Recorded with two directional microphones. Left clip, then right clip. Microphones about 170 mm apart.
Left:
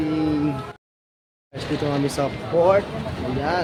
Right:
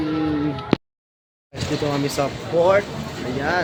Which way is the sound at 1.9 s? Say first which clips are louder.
Even; 10° left (ahead or behind).